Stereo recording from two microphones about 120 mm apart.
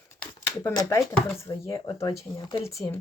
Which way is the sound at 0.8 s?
25° left (ahead or behind).